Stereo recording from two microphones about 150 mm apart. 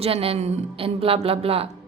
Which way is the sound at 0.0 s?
40° right (ahead or behind).